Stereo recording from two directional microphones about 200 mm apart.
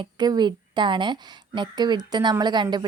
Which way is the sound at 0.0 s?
20° right (ahead or behind).